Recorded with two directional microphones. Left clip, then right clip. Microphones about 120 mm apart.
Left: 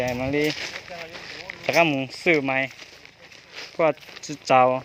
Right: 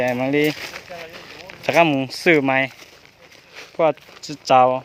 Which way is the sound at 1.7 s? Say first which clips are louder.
Right 4 dB; 50° right (ahead or behind).